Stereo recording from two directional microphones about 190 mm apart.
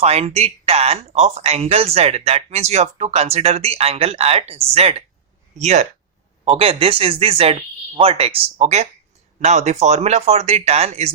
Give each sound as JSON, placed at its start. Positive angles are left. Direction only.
{"t": 0.0, "sound": "speech", "side_deg": -35}